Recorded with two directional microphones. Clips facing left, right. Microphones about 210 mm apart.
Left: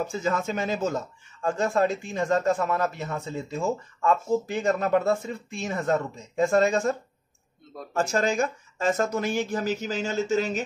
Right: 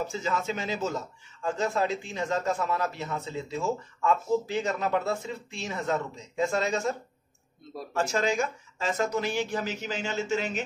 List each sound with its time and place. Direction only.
0.0 s a man's voice: 50° left (ahead or behind)